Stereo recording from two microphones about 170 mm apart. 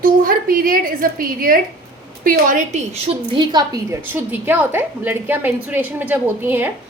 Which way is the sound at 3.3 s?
25° right (ahead or behind).